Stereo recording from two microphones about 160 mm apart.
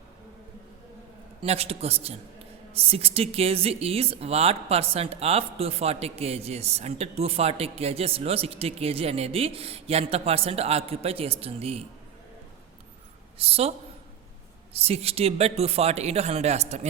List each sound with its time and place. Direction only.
1.4 s speech: 40° right (ahead or behind)
13.4 s speech: 40° right (ahead or behind)